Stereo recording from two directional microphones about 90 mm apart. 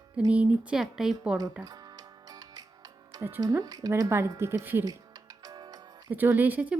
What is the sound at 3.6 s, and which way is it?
Speech, 40° right (ahead or behind).